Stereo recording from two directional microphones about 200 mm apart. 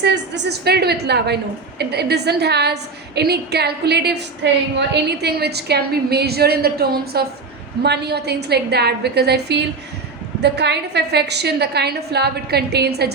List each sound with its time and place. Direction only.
0.0 s a woman's voice: 55° right (ahead or behind)